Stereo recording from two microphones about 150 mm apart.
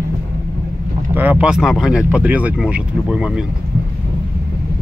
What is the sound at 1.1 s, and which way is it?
Speech, 10° right (ahead or behind).